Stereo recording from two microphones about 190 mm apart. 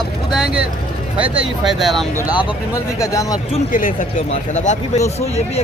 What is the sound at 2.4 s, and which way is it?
Speech, 15° left (ahead or behind).